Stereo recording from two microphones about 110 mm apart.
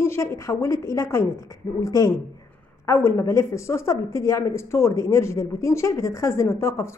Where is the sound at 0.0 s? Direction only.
25° left (ahead or behind).